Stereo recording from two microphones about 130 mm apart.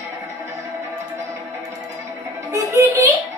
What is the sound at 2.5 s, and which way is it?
Music, 25° right (ahead or behind).